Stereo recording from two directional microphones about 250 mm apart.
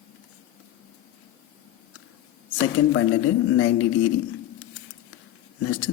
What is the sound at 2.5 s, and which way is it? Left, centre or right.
A man's voice, left.